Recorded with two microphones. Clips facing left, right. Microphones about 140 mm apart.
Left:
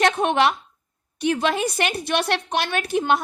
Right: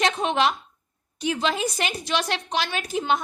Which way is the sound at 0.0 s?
60° left (ahead or behind).